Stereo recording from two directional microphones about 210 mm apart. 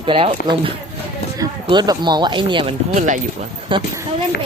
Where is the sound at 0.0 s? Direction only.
25° right (ahead or behind).